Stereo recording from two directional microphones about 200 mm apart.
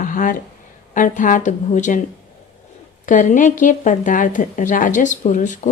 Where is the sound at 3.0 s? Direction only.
40° left (ahead or behind).